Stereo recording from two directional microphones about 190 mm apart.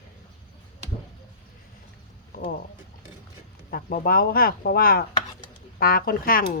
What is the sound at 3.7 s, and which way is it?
Chopping, 50° left (ahead or behind).